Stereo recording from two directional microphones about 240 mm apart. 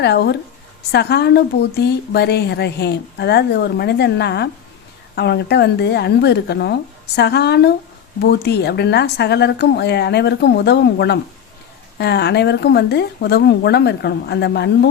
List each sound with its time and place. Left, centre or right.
0.0 s a woman's voice: left